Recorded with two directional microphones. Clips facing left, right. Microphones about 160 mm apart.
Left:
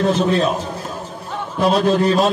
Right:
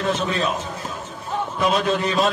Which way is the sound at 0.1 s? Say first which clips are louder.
Left 6 dB; 35° left (ahead or behind).